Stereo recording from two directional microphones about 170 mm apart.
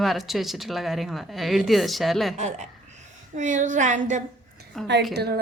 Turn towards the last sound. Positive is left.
turn(degrees=-70)  # may be behind; listen again after turning